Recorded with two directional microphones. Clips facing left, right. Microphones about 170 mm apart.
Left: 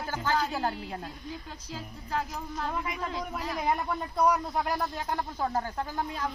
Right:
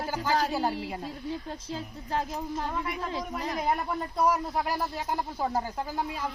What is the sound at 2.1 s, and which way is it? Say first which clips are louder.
Music: right 2 dB; 25° right (ahead or behind).